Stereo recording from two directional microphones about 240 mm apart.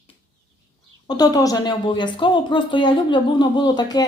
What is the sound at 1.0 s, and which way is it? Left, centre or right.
A woman's voice, centre.